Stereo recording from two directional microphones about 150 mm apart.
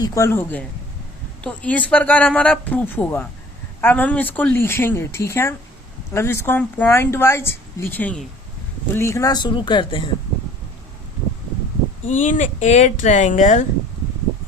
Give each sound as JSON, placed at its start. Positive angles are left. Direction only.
{"t": 0.0, "sound": "speech", "side_deg": 20}
{"t": 12.0, "sound": "speech", "side_deg": 55}